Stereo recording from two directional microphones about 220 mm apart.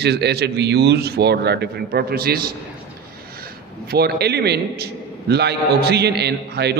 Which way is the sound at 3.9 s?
45° right (ahead or behind).